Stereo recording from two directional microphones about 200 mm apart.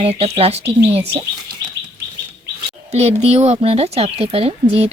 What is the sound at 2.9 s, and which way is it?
Speech, 35° right (ahead or behind).